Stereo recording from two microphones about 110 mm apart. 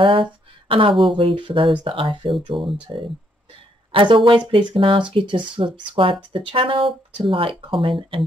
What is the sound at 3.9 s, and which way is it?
Speech, 50° right (ahead or behind).